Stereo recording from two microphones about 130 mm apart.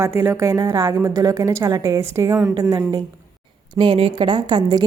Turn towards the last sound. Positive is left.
turn(degrees=-35)  # may be behind; listen again after turning